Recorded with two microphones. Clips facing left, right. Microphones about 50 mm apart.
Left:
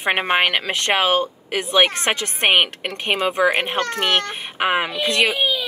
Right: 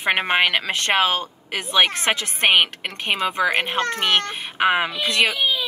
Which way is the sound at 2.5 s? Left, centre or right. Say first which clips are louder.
Left 1 dB; centre.